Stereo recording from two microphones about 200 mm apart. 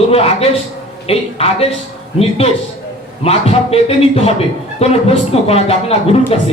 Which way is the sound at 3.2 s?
30° left (ahead or behind).